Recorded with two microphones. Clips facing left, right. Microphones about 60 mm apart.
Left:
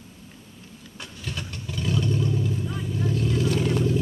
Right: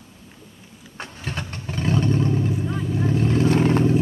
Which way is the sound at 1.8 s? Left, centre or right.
Right.